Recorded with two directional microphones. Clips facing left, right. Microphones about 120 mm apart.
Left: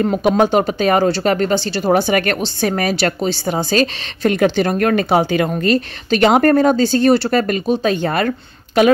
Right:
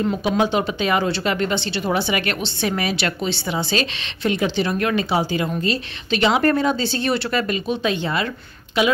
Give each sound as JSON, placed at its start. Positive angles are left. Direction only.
{"t": 0.0, "sound": "speech", "side_deg": 50}
{"t": 6.0, "sound": "speech", "side_deg": 50}